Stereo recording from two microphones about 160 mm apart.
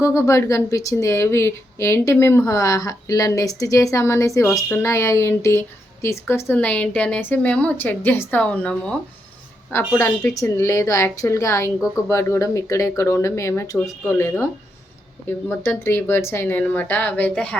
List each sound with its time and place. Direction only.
0.0 s a woman's voice: 20° left (ahead or behind)
15.4 s a woman's voice: 15° left (ahead or behind)